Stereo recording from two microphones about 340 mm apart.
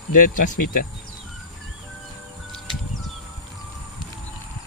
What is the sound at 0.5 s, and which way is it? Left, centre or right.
Speech, left.